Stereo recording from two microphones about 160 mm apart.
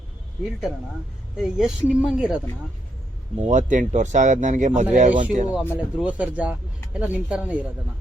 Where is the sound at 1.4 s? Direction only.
5° right (ahead or behind).